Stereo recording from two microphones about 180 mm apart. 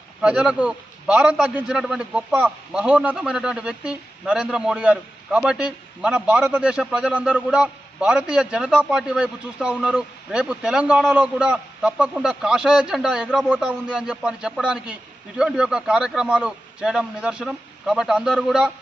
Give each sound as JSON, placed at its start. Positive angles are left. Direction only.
{"t": 0.2, "sound": "a man's voice", "side_deg": -5}